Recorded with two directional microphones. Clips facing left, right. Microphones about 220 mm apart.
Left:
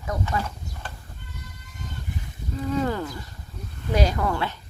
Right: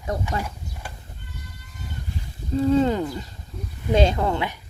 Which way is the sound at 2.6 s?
30° right (ahead or behind).